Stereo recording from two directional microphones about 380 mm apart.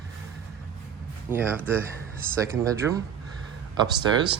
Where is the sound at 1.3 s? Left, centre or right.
Centre.